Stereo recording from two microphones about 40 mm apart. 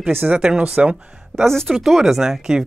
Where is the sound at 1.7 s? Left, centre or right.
Centre.